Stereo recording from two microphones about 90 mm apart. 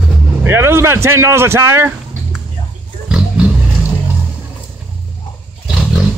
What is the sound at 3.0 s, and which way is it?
Roaring cats, 10° right (ahead or behind).